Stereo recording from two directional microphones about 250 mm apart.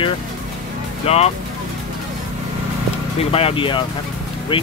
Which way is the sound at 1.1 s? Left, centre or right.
Left.